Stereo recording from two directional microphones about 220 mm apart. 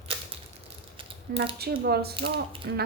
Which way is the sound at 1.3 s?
45° right (ahead or behind).